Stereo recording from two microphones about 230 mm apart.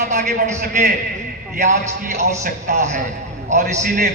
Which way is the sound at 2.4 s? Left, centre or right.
Right.